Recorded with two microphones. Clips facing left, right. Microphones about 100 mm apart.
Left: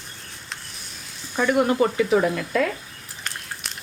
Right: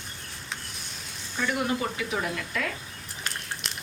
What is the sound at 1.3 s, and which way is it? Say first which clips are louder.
Speech: left 9 dB; 50° left (ahead or behind).